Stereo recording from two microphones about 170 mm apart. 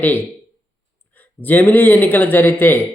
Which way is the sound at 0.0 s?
10° left (ahead or behind).